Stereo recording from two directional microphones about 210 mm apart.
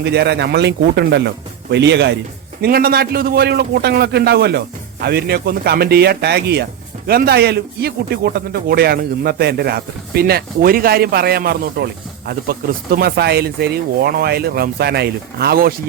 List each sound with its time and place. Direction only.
0.0 s a man's voice: 55° right (ahead or behind)